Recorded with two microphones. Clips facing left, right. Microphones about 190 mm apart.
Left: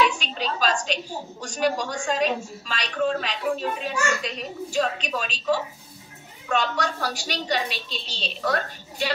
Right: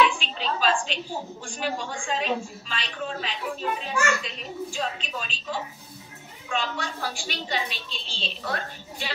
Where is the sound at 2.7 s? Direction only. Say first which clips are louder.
Left 8 dB; 65° left (ahead or behind).